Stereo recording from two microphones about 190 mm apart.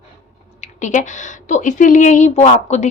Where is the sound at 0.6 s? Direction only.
40° left (ahead or behind).